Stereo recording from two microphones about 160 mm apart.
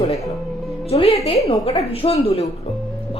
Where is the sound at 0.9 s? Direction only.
40° left (ahead or behind).